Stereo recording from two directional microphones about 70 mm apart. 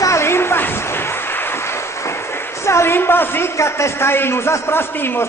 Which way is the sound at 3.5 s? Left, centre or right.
Left.